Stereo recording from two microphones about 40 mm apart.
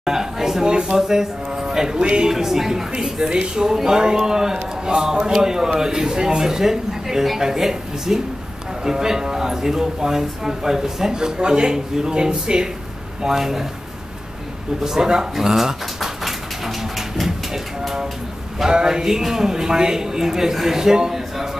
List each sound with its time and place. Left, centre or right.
0.0 s speech: centre
2.3 s speech: centre
3.3 s speech: right
3.6 s speech: centre
13.2 s speech: centre
14.8 s speech: centre
15.3 s bird: centre
18.6 s speech: centre